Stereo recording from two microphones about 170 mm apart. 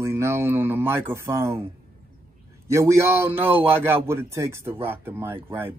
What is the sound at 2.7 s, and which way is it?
Speech, 15° right (ahead or behind).